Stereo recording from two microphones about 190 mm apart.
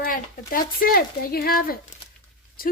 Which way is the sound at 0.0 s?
50° left (ahead or behind).